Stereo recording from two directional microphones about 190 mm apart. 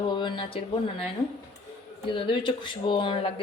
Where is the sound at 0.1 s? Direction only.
25° left (ahead or behind).